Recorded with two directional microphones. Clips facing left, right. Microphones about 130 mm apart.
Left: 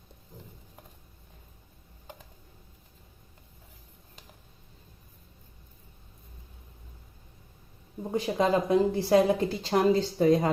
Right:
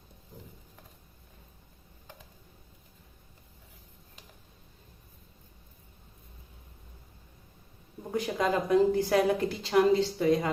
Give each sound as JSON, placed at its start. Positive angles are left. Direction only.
{"t": 8.1, "sound": "a woman's voice", "side_deg": 30}